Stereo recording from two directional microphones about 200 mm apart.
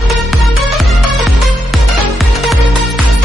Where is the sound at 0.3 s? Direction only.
Centre (ahead or behind).